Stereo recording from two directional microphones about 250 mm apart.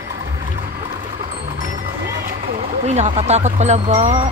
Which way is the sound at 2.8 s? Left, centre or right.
Right.